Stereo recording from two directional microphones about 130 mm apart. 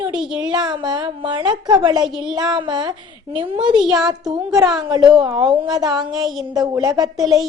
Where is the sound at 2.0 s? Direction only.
5° right (ahead or behind).